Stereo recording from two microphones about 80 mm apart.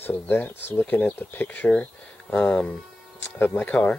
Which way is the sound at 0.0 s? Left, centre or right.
Left.